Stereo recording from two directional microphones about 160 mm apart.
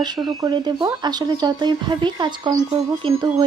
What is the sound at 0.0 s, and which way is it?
Speech, 25° right (ahead or behind).